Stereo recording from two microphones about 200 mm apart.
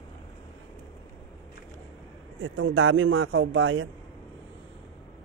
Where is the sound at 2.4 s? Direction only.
85° right.